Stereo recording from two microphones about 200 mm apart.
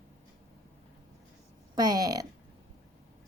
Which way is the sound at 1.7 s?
20° right (ahead or behind).